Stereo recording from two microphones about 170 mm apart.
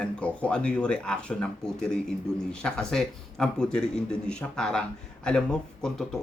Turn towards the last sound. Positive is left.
turn(degrees=5)  # may be behind; listen again after turning